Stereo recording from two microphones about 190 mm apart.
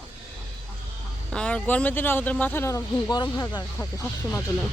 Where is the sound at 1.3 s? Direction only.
5° left (ahead or behind).